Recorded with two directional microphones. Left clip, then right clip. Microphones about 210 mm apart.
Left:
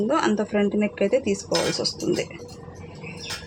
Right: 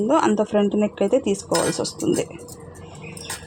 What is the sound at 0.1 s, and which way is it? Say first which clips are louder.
Speech: right 6 dB; 30° right (ahead or behind).